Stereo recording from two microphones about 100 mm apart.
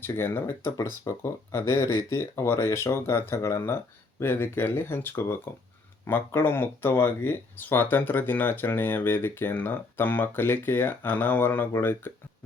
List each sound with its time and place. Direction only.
0.0 s speech: 20° left (ahead or behind)